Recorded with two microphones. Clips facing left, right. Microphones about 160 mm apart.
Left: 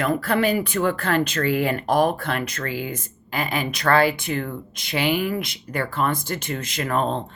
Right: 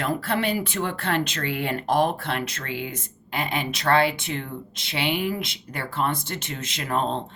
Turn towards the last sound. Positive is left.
turn(degrees=-25)  # may be behind; listen again after turning